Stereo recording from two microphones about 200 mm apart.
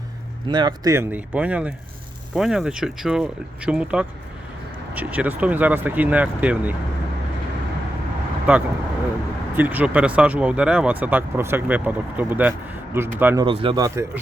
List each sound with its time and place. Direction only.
0.4 s speech: 20° right (ahead or behind)
8.5 s speech: 5° right (ahead or behind)
13.4 s speech: 25° right (ahead or behind)